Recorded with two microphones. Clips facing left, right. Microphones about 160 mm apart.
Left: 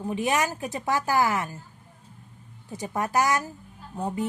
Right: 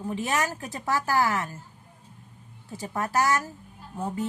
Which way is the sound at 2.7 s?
15° left (ahead or behind).